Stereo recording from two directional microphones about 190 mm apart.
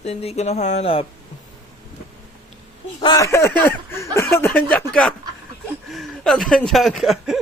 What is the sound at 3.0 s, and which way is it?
Speech, 20° left (ahead or behind).